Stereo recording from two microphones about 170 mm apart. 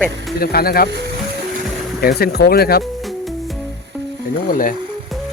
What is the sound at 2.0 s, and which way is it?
Speech, 65° left (ahead or behind).